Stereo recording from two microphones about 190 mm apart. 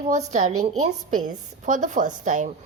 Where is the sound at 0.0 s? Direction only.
35° right (ahead or behind).